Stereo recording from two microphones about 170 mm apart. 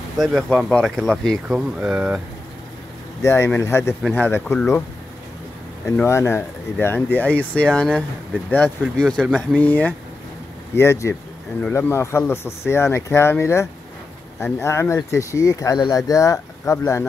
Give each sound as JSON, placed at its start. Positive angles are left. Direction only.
{"t": 0.2, "sound": "speech", "side_deg": 0}
{"t": 3.2, "sound": "speech", "side_deg": 15}
{"t": 5.9, "sound": "speech", "side_deg": 15}
{"t": 9.6, "sound": "speech", "side_deg": 10}